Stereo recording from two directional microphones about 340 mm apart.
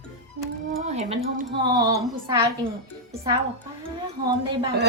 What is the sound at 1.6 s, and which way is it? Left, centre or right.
Speech, centre.